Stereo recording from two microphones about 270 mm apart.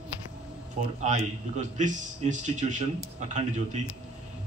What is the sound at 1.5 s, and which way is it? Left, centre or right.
Speech, right.